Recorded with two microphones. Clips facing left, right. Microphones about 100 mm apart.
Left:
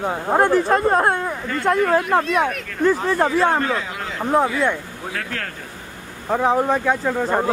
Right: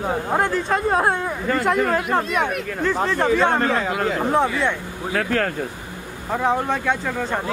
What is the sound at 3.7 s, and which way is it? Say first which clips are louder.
Speech: right 6 dB; 50° right (ahead or behind).